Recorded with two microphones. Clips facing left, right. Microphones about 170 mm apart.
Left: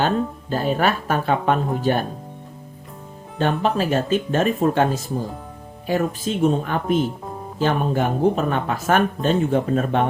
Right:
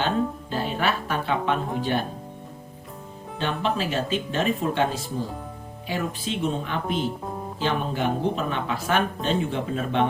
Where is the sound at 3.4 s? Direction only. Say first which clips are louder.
Left 6 dB; 45° left (ahead or behind).